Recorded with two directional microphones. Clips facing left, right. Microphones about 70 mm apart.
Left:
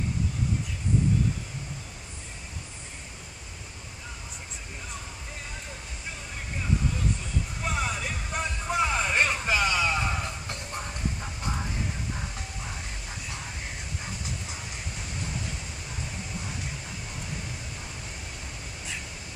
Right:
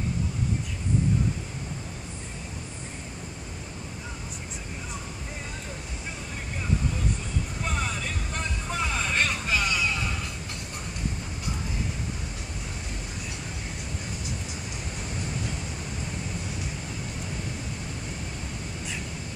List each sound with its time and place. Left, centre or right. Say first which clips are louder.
7.6 s music: left 2 dB; centre; by 10.1 s left